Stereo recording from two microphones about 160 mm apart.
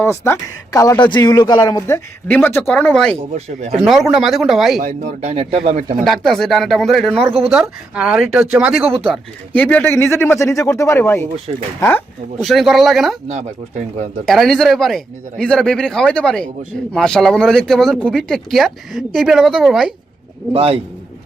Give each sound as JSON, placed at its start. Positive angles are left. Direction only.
{"t": 0.0, "sound": "speech", "side_deg": 15}
{"t": 2.2, "sound": "speech", "side_deg": 10}
{"t": 3.3, "sound": "speech", "side_deg": -45}
{"t": 3.8, "sound": "speech", "side_deg": 0}
{"t": 4.8, "sound": "speech", "side_deg": -50}
{"t": 6.1, "sound": "speech", "side_deg": 0}
{"t": 9.0, "sound": "speech", "side_deg": 10}
{"t": 12.4, "sound": "speech", "side_deg": 0}
{"t": 13.2, "sound": "speech", "side_deg": -45}
{"t": 14.3, "sound": "speech", "side_deg": 0}
{"t": 20.5, "sound": "a man's voice", "side_deg": -40}